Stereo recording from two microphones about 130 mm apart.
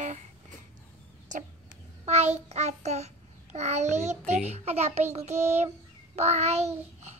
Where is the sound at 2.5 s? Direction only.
60° right (ahead or behind).